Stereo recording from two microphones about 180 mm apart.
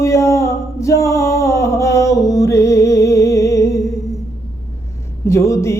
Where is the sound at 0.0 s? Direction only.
15° left (ahead or behind).